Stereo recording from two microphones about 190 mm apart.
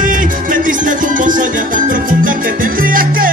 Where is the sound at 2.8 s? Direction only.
50° right (ahead or behind).